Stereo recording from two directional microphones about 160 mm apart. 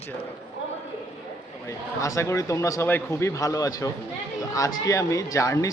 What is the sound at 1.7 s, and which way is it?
Speech, 20° left (ahead or behind).